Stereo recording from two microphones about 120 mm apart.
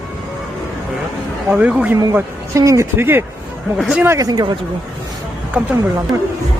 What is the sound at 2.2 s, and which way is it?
Speech, 25° right (ahead or behind).